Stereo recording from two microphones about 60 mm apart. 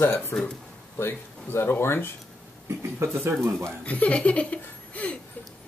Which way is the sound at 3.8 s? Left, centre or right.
Left.